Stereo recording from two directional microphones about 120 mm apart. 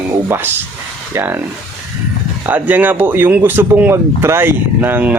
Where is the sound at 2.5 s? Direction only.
15° right (ahead or behind).